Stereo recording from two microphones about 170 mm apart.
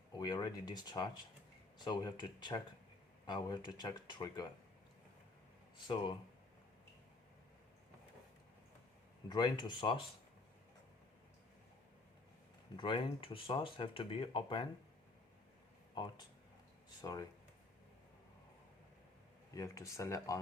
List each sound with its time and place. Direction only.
0.1 s speech: 25° left (ahead or behind)
5.7 s speech: 25° left (ahead or behind)
9.3 s speech: 25° left (ahead or behind)
12.7 s speech: 30° left (ahead or behind)
16.0 s speech: 25° left (ahead or behind)
19.5 s speech: 20° left (ahead or behind)